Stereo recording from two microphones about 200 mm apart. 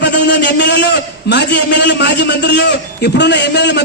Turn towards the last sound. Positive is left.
turn(degrees=60)  # may be behind; listen again after turning